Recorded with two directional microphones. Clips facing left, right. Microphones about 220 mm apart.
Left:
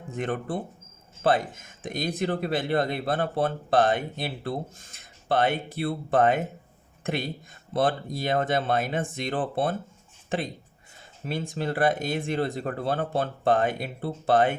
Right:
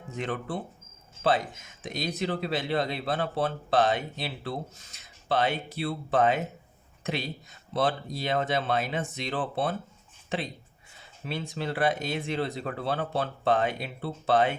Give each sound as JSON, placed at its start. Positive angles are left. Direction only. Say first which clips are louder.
{"t": 0.2, "sound": "speech", "louder": "left 3 dB", "side_deg": 50}